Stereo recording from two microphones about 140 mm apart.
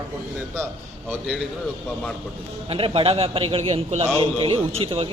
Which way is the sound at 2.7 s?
40° right (ahead or behind).